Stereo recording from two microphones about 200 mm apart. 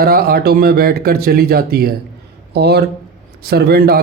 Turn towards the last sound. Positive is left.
turn(degrees=-50)  # may be behind; listen again after turning